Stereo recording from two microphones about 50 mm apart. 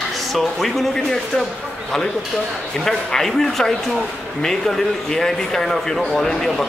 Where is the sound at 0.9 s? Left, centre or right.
Centre.